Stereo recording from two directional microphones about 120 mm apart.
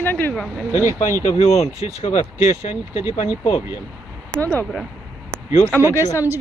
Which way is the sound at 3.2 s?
45° left (ahead or behind).